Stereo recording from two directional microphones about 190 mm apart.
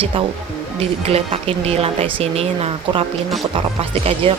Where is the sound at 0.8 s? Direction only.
30° right (ahead or behind).